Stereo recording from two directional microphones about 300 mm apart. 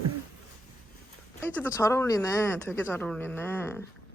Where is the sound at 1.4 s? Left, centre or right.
Centre.